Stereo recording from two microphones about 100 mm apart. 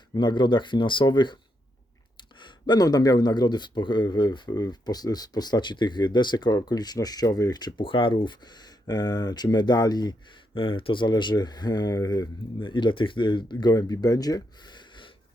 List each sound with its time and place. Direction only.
0.1 s speech: 50° left (ahead or behind)
10.5 s speech: 60° left (ahead or behind); by 12.3 s 40° left (ahead or behind)
12.5 s speech: 55° left (ahead or behind)